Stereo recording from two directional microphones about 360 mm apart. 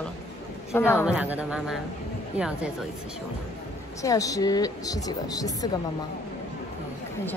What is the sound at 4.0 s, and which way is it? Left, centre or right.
Speech, centre.